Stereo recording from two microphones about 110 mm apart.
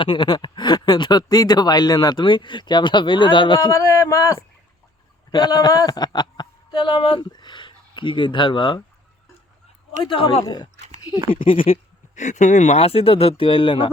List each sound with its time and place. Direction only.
0.0 s speech: 45° left (ahead or behind)
3.7 s speech: 25° left (ahead or behind)
5.3 s a man's voice: 40° left (ahead or behind)
10.0 s speech: 50° left (ahead or behind)
10.8 s a sound: 90° right
11.3 s speech: 55° left (ahead or behind)
12.1 s speech: 90° left; by 13.9 s 50° left (ahead or behind)